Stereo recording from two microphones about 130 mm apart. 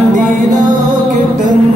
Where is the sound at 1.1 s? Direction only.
75° right (ahead or behind).